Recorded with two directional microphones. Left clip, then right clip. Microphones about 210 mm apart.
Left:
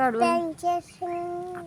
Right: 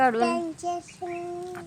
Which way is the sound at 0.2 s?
50° left (ahead or behind).